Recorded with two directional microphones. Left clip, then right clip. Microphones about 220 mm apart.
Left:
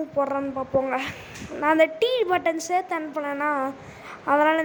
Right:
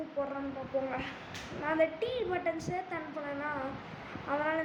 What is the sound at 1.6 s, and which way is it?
A woman's voice, 45° left (ahead or behind).